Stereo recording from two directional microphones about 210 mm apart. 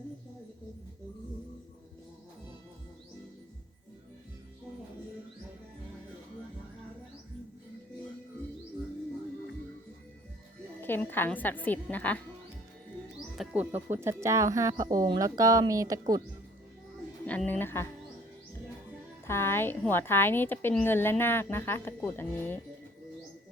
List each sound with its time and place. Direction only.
10.8 s a woman's voice: 10° left (ahead or behind); by 16.2 s 15° right (ahead or behind)
17.2 s a woman's voice: 5° left (ahead or behind)
19.3 s a woman's voice: 10° left (ahead or behind)